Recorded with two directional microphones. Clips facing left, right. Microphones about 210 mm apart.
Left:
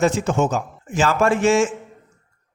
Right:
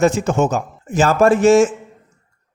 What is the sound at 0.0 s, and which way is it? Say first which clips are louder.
A man's voice: right 3 dB; 45° right (ahead or behind).